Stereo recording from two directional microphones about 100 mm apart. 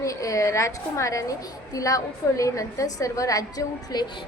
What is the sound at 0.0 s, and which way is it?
A woman's voice, 35° left (ahead or behind).